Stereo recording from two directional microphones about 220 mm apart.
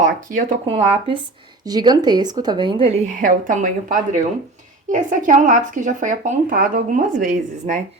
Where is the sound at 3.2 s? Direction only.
35° right (ahead or behind).